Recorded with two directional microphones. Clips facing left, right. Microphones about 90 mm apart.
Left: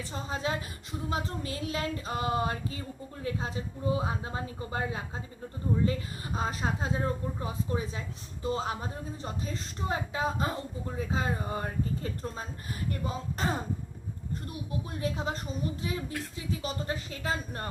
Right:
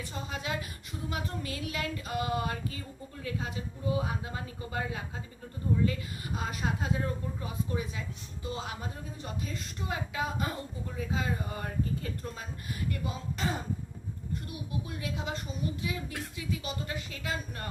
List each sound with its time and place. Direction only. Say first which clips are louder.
0.1 s speech: left 6 dB; 30° left (ahead or behind)
1.1 s a sound: left 3 dB; 30° left (ahead or behind)
3.2 s speech: left 3 dB; 30° left (ahead or behind)